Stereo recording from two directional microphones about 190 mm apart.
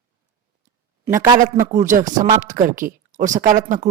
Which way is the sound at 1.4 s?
45° right (ahead or behind).